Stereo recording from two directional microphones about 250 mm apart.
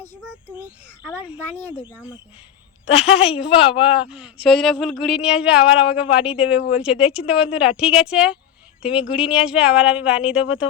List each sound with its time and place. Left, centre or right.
0.2 s speech: centre
1.8 s speech: centre
2.9 s speech: left
4.1 s speech: centre